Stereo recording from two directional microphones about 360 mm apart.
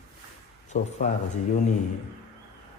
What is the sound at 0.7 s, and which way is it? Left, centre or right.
Speech, centre.